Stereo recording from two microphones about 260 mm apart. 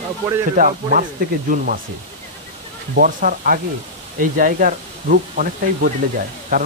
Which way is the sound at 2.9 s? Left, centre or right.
Right.